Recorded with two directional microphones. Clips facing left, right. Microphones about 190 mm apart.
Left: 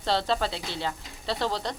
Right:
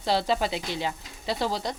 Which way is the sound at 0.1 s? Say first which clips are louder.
Right 1 dB; 10° right (ahead or behind).